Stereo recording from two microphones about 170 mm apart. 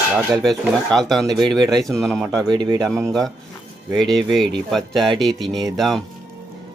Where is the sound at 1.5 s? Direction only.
25° right (ahead or behind).